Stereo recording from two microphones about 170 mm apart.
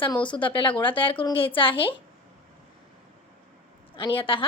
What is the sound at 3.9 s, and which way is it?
Speech, 30° left (ahead or behind).